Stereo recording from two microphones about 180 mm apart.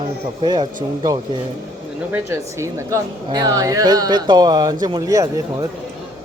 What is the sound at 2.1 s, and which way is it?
A woman's voice, 15° right (ahead or behind).